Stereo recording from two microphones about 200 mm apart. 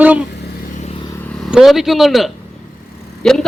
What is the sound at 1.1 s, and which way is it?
A man's voice, 10° left (ahead or behind).